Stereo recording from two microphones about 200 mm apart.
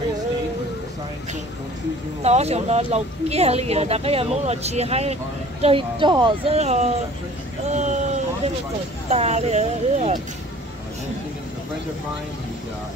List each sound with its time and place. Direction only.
2.2 s speech: 30° right (ahead or behind)
7.7 s a sound: 35° right (ahead or behind)
9.1 s speech: 30° right (ahead or behind)